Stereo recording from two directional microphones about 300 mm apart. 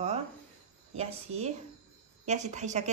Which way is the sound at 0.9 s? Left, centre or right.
Right.